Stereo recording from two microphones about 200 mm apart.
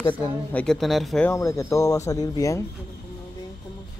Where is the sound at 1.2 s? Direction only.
15° left (ahead or behind).